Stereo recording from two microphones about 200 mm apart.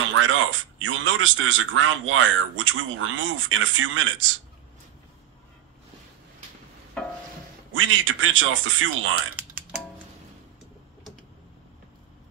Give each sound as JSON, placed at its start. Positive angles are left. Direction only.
{"t": 0.1, "sound": "speech", "side_deg": -80}
{"t": 7.7, "sound": "speech", "side_deg": -80}